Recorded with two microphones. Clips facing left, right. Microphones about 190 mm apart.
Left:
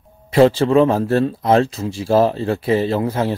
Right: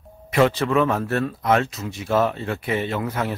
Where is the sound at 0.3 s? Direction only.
30° left (ahead or behind).